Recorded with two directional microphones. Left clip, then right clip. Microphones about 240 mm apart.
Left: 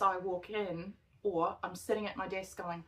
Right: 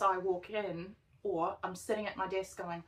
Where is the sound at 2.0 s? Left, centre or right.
Left.